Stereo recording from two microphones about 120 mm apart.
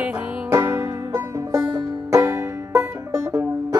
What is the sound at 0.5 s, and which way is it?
Music, 20° right (ahead or behind).